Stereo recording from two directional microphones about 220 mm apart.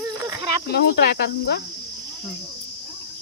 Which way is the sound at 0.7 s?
45° left (ahead or behind).